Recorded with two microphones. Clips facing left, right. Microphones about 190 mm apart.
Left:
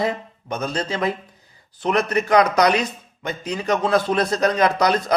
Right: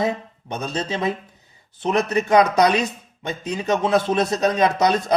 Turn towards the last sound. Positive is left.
turn(degrees=-25)  # may be behind; listen again after turning